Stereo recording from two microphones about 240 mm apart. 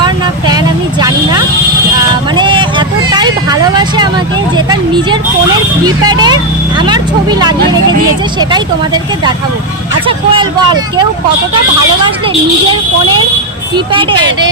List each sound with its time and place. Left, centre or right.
0.0 s vehicle: centre
4.5 s a sound: centre
5.8 s speech: centre
13.7 s speech: right